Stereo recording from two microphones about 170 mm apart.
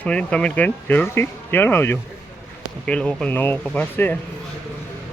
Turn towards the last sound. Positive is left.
turn(degrees=10)  # may be behind; listen again after turning